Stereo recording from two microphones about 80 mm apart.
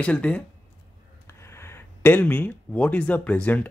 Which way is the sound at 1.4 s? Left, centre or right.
Left.